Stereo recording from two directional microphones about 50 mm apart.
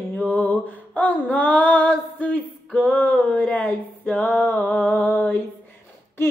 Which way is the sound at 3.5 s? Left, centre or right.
Left.